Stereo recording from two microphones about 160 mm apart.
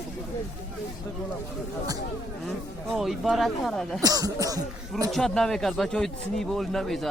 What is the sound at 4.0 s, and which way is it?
Speech, 20° right (ahead or behind).